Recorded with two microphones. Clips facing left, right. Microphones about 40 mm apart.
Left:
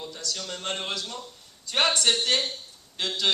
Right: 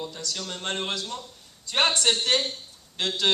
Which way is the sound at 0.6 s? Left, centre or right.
Right.